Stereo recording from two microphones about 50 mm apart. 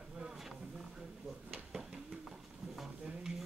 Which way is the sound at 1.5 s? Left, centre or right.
Centre.